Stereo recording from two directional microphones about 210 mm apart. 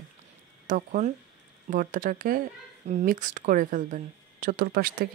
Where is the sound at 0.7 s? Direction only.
35° right (ahead or behind).